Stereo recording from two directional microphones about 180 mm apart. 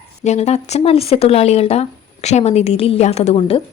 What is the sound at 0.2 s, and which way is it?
A woman's voice, 40° left (ahead or behind).